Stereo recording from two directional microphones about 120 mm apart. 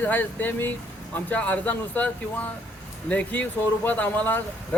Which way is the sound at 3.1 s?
10° left (ahead or behind).